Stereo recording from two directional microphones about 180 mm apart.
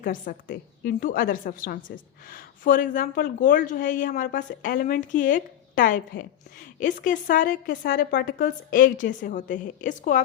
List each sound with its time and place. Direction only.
0.0 s speech: 50° left (ahead or behind)